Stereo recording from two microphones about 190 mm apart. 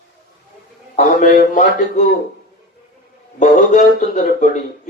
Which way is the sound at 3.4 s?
40° left (ahead or behind).